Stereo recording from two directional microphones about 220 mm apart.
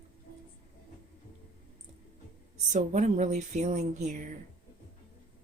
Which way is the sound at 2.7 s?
35° right (ahead or behind).